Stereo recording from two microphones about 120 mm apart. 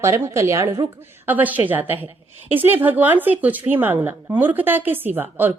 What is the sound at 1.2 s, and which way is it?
A woman's voice, 15° right (ahead or behind).